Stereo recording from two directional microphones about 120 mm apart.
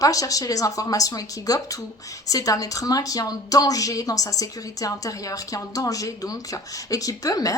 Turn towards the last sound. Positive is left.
turn(degrees=30)  # may be behind; listen again after turning